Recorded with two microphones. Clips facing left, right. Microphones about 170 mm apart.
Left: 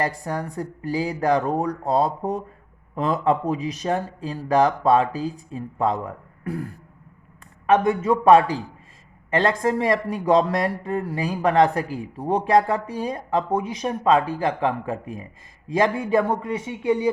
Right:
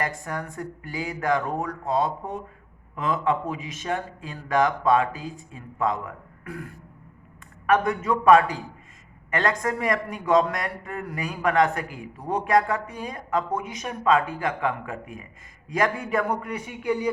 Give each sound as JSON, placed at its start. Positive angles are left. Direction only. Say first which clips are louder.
{"t": 0.0, "sound": "a man's voice", "louder": "left 4 dB", "side_deg": 35}